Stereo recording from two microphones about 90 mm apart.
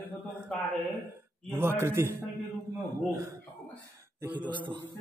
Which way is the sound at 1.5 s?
25° right (ahead or behind).